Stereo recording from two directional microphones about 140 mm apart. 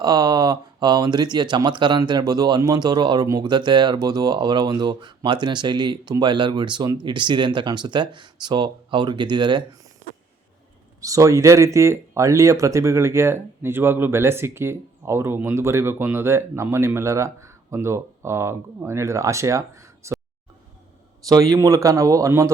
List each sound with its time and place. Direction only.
0.0 s speech: 30° right (ahead or behind)
11.0 s speech: 25° right (ahead or behind)
21.2 s speech: 25° right (ahead or behind)